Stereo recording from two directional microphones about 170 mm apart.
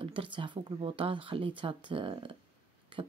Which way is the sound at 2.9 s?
30° right (ahead or behind).